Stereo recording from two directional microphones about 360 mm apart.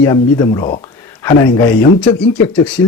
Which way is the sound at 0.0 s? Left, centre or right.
Centre.